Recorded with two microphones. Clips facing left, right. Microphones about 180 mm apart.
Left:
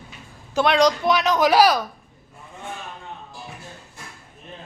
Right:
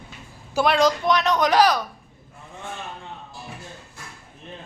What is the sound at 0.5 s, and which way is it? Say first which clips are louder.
Speech: left 1 dB; centre (ahead or behind).